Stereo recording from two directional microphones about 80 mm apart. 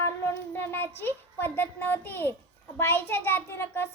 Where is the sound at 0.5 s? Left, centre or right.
Left.